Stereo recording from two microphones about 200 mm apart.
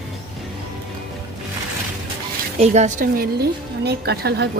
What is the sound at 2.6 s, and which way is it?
Speech, 35° right (ahead or behind).